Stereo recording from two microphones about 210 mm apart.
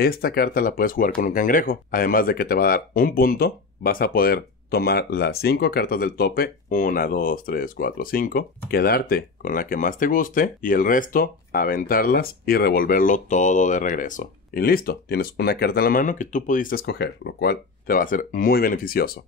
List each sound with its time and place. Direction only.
0.0 s speech: 45° left (ahead or behind)